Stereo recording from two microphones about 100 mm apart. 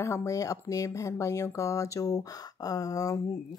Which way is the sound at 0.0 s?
30° left (ahead or behind).